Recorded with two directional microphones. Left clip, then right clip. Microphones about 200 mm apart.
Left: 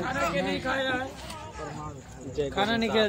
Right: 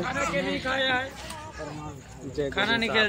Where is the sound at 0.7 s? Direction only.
40° left (ahead or behind).